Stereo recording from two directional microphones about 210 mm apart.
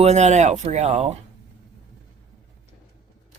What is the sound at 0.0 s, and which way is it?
Speech, 30° right (ahead or behind).